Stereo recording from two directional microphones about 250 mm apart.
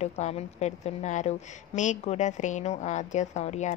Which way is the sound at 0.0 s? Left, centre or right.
Left.